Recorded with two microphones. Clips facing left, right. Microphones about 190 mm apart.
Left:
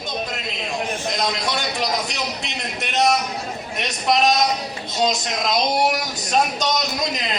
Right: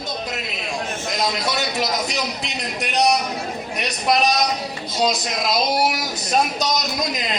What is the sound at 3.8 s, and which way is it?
Speech, centre (ahead or behind).